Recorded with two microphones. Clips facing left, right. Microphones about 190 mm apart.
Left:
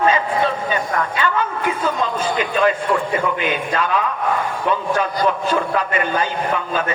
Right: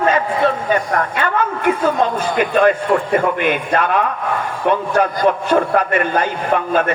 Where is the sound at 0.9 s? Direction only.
55° right (ahead or behind).